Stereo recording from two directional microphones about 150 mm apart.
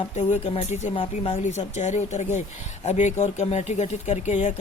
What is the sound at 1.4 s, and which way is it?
Speech, 50° left (ahead or behind).